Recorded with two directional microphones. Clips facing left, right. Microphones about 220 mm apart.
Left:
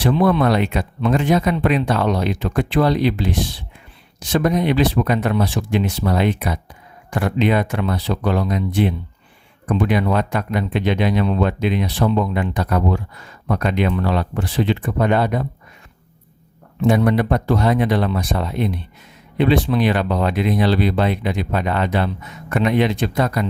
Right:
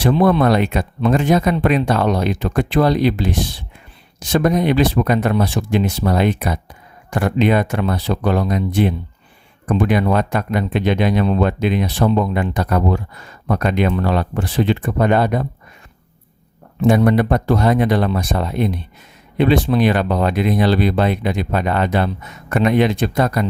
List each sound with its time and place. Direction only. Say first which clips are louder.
0.0 s speech: right 2 dB; 45° right (ahead or behind)
16.8 s speech: right 2 dB; 45° right (ahead or behind)